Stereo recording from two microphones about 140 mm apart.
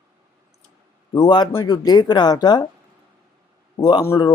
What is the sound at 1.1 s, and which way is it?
A man's voice, 30° left (ahead or behind).